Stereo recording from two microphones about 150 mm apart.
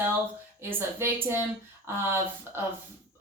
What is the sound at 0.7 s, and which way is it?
Speech, 15° right (ahead or behind).